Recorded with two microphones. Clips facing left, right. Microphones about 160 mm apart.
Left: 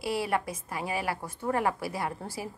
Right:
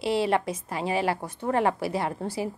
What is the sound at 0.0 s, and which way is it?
A woman's voice, 25° right (ahead or behind).